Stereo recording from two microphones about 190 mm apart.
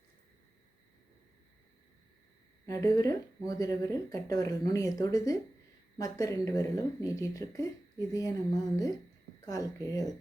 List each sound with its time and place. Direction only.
2.6 s speech: 20° left (ahead or behind)